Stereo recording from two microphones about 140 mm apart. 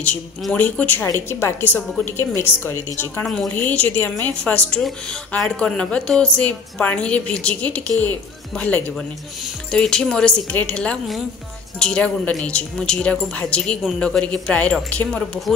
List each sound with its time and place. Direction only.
0.0 s a woman's voice: 10° left (ahead or behind)